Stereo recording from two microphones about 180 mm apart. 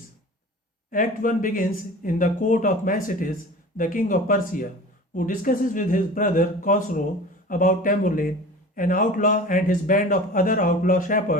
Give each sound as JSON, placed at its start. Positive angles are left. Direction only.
{"t": 0.9, "sound": "a man's voice", "side_deg": 50}